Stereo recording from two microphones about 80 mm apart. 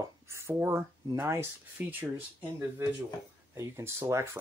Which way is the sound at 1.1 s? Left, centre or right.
Right.